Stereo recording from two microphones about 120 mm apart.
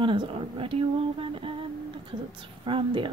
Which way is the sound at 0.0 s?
45° right (ahead or behind).